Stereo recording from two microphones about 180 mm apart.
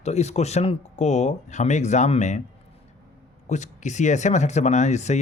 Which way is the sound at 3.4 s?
40° left (ahead or behind).